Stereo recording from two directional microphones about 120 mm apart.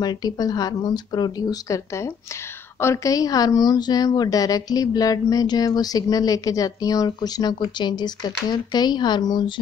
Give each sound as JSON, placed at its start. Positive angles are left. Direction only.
{"t": 0.0, "sound": "a woman's voice", "side_deg": 35}